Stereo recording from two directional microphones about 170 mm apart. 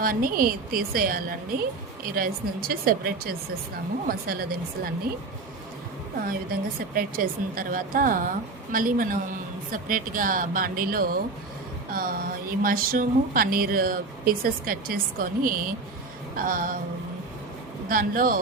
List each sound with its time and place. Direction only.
0.0 s speech: 60° right (ahead or behind)
6.2 s speech: 60° right (ahead or behind)
17.8 s speech: 55° right (ahead or behind)